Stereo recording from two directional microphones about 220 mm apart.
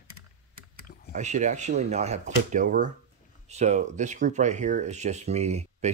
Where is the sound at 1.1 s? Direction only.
35° right (ahead or behind).